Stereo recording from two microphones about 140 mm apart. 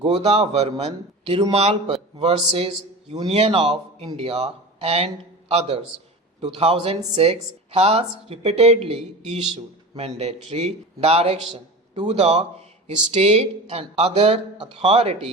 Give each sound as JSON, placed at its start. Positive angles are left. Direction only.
{"t": 0.0, "sound": "a man's voice", "side_deg": -50}
{"t": 10.0, "sound": "speech", "side_deg": -50}